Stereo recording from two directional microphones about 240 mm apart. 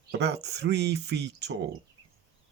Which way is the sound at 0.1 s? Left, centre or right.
Right.